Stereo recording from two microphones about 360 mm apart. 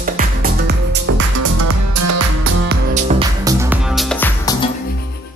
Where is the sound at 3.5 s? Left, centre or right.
Centre.